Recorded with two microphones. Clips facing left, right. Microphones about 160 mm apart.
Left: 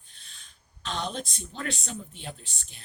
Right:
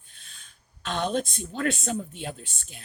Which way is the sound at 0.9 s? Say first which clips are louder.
Right 6 dB; 50° right (ahead or behind).